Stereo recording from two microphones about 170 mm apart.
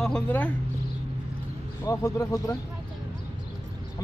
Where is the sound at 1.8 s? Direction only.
20° left (ahead or behind).